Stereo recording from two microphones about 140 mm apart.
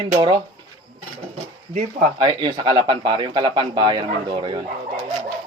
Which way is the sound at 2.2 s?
30° right (ahead or behind).